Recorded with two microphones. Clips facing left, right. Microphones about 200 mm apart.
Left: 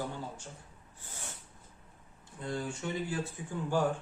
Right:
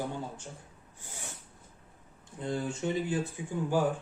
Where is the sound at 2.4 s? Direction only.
20° right (ahead or behind).